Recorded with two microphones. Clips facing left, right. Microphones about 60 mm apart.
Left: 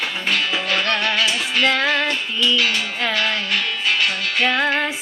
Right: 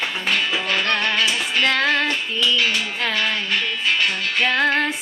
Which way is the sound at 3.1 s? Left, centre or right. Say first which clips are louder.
Left 1 dB; right.